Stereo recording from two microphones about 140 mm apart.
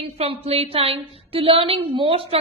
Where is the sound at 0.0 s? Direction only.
45° right (ahead or behind).